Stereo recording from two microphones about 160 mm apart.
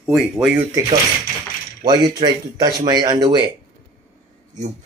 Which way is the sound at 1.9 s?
25° right (ahead or behind).